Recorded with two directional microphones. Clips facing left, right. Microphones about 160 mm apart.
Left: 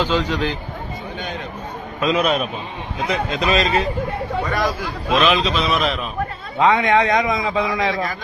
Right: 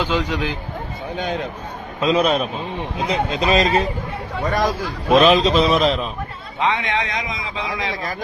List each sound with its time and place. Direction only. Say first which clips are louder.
0.0 s a man's voice: left 1 dB; 10° right (ahead or behind)
2.0 s speech: right 1 dB; 35° right (ahead or behind)
6.6 s a man's voice: left 6 dB; 45° left (ahead or behind)